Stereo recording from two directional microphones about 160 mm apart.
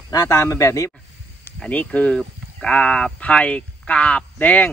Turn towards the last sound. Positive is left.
turn(degrees=10)  # may be behind; listen again after turning